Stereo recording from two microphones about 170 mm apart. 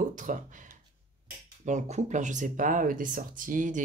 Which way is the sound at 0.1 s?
50° right (ahead or behind).